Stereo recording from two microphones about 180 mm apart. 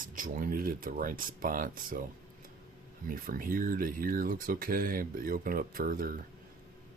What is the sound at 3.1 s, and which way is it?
Speech, 50° right (ahead or behind).